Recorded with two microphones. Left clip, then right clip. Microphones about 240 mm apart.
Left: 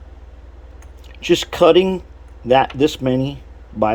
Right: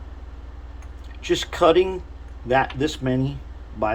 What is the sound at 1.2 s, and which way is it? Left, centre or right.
Speech, left.